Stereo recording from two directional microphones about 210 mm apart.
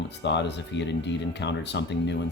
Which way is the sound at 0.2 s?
55° left (ahead or behind).